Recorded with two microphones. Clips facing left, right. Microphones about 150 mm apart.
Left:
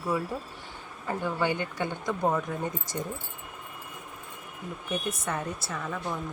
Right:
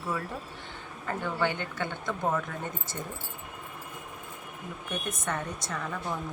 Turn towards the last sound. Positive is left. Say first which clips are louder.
# left 1 dB
turn(degrees=5)  # may be behind; listen again after turning